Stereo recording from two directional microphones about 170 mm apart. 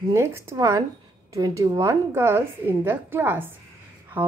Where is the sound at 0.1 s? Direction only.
15° right (ahead or behind).